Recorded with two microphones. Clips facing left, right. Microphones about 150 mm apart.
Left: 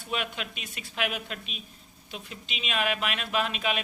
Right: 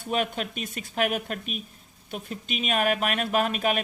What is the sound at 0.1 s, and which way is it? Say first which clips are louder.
Speech: right 6 dB; 45° right (ahead or behind).